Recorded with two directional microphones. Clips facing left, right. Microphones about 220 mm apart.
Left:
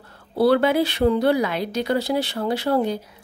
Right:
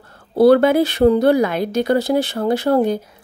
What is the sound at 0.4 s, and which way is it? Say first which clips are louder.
Speech: right 6 dB; 45° right (ahead or behind).